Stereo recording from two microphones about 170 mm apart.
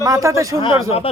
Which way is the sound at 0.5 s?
30° left (ahead or behind).